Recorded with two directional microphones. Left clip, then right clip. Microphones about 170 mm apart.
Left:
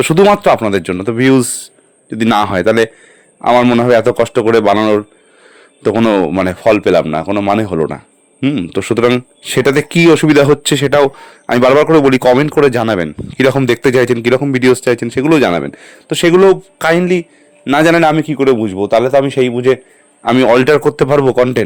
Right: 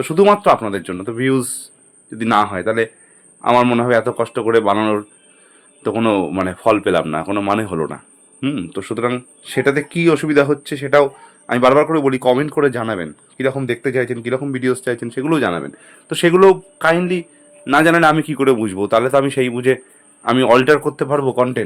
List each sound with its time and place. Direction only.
0.0 s speech: 50° left (ahead or behind)
2.4 s a man's voice: 60° left (ahead or behind)
3.4 s speech: 30° left (ahead or behind)
3.8 s speech: 50° left (ahead or behind)
4.7 s a man's voice: 30° left (ahead or behind)
6.6 s a man's voice: 30° left (ahead or behind)
8.7 s speech: 45° left (ahead or behind)
13.3 s a man's voice: 55° left (ahead or behind)
16.0 s a man's voice: 30° left (ahead or behind)
20.3 s speech: 35° left (ahead or behind)